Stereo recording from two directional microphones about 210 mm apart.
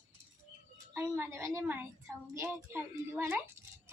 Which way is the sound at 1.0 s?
10° right (ahead or behind).